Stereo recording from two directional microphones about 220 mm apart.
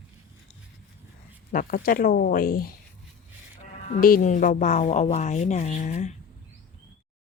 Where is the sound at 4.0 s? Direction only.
40° left (ahead or behind).